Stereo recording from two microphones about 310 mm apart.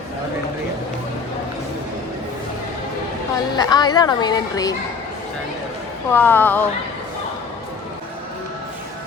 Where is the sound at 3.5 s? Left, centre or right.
Centre.